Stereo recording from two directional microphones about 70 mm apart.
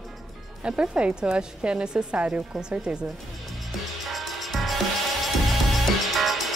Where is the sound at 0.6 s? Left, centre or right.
Centre.